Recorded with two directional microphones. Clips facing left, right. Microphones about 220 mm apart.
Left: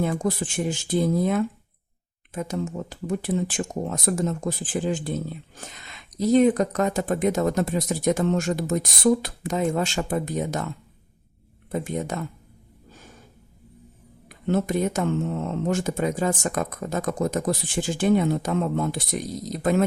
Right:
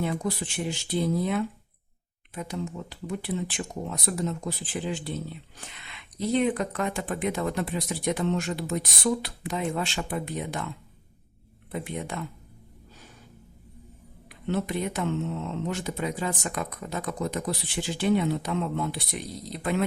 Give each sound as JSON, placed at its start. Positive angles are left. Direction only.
{"t": 0.0, "sound": "speech", "side_deg": 45}
{"t": 11.7, "sound": "speech", "side_deg": 45}
{"t": 14.3, "sound": "speech", "side_deg": 45}